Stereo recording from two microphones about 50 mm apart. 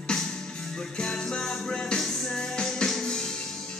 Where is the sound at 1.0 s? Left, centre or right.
Centre.